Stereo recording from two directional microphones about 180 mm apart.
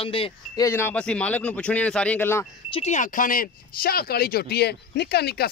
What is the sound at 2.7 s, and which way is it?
Speech, 40° left (ahead or behind).